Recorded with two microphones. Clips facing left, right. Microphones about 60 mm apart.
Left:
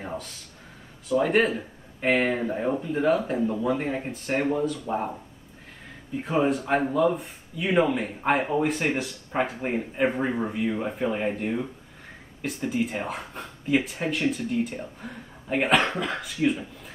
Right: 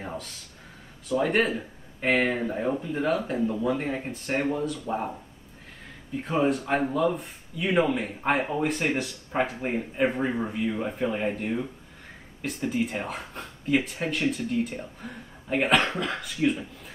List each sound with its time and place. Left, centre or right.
0.0 s a sound: centre
1.0 s speech: centre
6.2 s speech: centre